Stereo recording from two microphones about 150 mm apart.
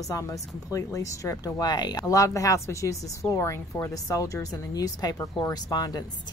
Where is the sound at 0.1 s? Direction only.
20° left (ahead or behind).